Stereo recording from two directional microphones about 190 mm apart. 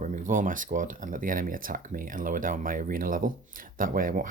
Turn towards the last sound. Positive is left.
turn(degrees=-45)  # may be behind; listen again after turning